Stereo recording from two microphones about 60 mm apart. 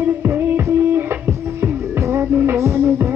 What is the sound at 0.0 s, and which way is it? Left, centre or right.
Music, right.